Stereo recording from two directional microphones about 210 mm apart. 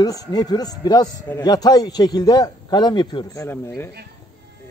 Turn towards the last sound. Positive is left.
turn(degrees=10)  # may be behind; listen again after turning